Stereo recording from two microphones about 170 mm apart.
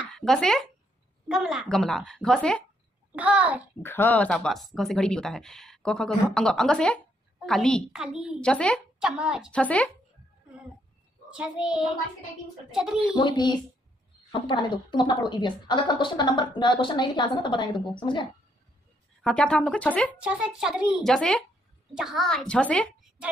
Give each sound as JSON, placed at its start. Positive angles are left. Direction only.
{"t": 0.1, "sound": "speech", "side_deg": 5}
{"t": 3.1, "sound": "a child's voice", "side_deg": -10}
{"t": 3.8, "sound": "speech", "side_deg": 10}
{"t": 8.4, "sound": "speech", "side_deg": 5}
{"t": 9.6, "sound": "speech", "side_deg": 5}
{"t": 11.2, "sound": "speech", "side_deg": -5}
{"t": 13.1, "sound": "a woman's voice", "side_deg": 25}
{"t": 19.2, "sound": "speech", "side_deg": 5}
{"t": 20.2, "sound": "speech", "side_deg": -5}